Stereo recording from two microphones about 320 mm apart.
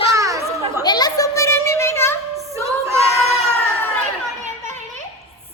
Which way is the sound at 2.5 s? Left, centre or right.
Centre.